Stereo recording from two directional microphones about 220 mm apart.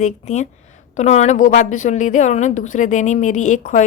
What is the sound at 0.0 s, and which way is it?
A woman's voice, 30° left (ahead or behind).